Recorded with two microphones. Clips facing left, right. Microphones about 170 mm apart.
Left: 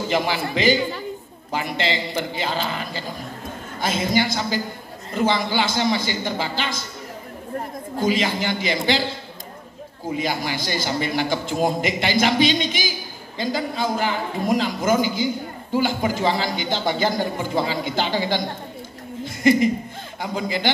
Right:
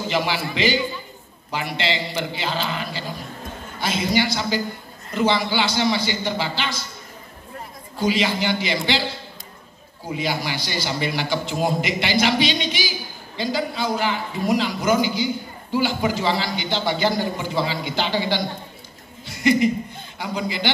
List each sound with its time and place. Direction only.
0.1 s a man's voice: 45° left (ahead or behind)
8.0 s a man's voice: 45° left (ahead or behind)
10.1 s a man's voice: 45° left (ahead or behind)
19.2 s a sound: 45° left (ahead or behind)
20.2 s a man's voice: 45° left (ahead or behind)